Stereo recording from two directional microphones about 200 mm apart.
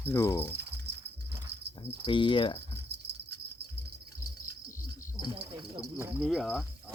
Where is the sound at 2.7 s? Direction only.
55° right (ahead or behind).